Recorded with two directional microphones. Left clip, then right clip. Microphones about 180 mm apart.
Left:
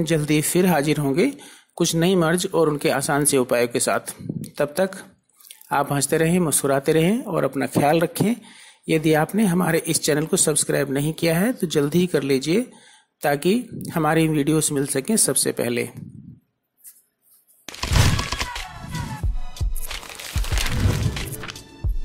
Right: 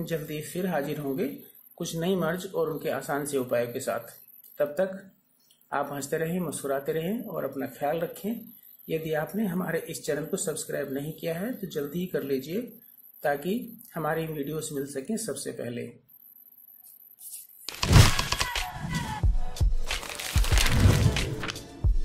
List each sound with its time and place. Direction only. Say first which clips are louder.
0.0 s speech: left 12 dB; 35° left (ahead or behind)
18.3 s music: left 1 dB; centre (ahead or behind)